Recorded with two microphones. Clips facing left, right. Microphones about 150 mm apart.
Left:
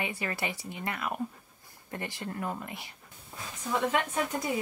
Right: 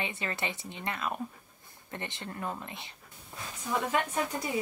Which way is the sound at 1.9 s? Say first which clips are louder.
Left 3 dB; 25° right (ahead or behind).